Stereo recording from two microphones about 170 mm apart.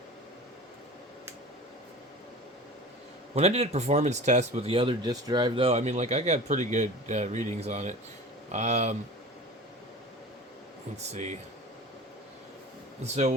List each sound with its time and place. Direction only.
3.3 s speech: 40° right (ahead or behind)
10.9 s speech: 40° right (ahead or behind)
13.0 s speech: 40° right (ahead or behind)